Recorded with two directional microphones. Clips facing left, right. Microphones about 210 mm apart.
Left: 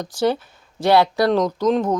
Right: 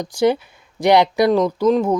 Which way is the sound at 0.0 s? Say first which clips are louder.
Right 3 dB; 15° right (ahead or behind).